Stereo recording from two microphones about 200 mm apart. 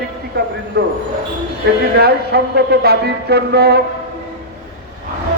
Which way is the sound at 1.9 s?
55° right (ahead or behind).